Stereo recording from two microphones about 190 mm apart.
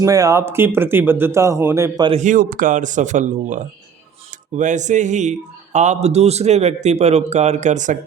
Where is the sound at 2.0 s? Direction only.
40° right (ahead or behind).